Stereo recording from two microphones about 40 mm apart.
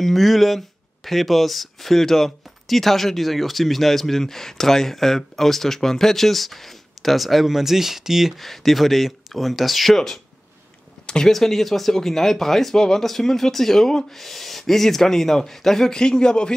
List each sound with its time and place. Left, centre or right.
0.0 s speech: centre
8.4 s speech: centre
11.3 s speech: centre